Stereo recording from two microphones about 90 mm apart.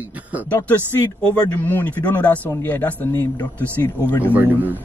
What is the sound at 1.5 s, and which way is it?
A man's voice, 20° left (ahead or behind).